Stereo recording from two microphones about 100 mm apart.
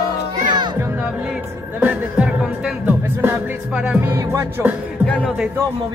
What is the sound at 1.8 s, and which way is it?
Music, 10° right (ahead or behind).